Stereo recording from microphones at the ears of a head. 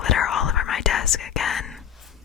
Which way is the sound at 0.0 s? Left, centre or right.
Left.